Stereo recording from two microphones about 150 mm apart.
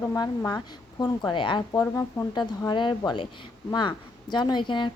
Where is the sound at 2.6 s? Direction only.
30° left (ahead or behind).